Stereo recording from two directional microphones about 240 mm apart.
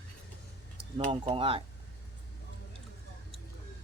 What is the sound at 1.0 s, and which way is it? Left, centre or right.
Speech, right.